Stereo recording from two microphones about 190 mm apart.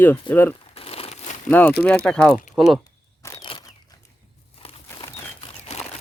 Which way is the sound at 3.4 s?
25° left (ahead or behind).